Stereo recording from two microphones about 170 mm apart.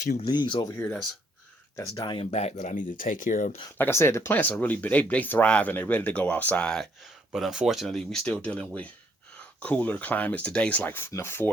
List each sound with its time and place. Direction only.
0.2 s speech: 25° left (ahead or behind)
1.7 s speech: 20° left (ahead or behind)
2.3 s speech: 40° left (ahead or behind)
3.8 s speech: 15° left (ahead or behind)